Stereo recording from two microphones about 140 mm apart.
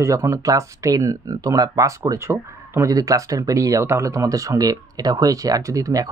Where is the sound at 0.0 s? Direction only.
20° right (ahead or behind).